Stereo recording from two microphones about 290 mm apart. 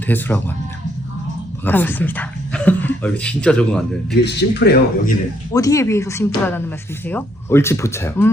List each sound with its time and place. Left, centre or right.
0.1 s speech: centre
1.6 s speech: centre
4.1 s speech: left
5.5 s speech: centre